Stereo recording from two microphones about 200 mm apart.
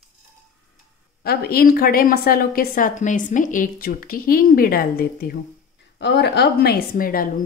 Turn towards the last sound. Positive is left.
turn(degrees=45)  # may be behind; listen again after turning